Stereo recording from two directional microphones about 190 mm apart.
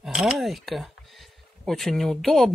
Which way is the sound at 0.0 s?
Centre (ahead or behind).